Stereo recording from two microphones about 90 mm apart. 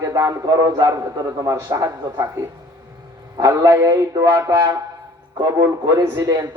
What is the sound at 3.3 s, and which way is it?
A man's voice, 40° right (ahead or behind).